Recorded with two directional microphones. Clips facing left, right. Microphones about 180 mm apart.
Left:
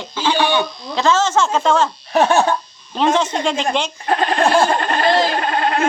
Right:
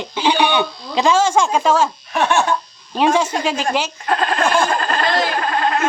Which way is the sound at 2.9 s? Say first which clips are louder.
Right 1 dB; 10° right (ahead or behind).